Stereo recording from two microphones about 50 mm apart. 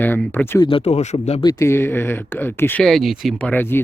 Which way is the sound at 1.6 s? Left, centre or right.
Left.